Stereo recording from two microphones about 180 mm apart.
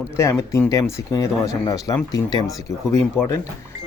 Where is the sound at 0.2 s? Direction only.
15° left (ahead or behind).